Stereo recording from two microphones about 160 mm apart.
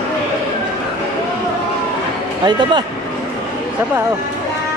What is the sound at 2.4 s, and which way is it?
Speech, 30° right (ahead or behind).